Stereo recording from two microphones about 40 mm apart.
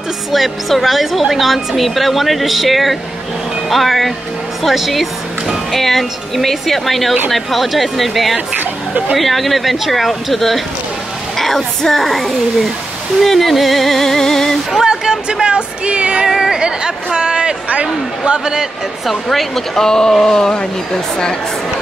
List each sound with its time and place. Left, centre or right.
0.3 s a woman's voice: centre
14.8 s a sound: centre
15.4 s female singing: right
16.3 s a sound: centre
16.5 s speech: right
19.2 s speech: centre